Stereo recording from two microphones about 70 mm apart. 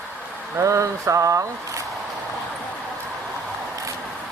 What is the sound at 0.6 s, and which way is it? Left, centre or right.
Speech, right.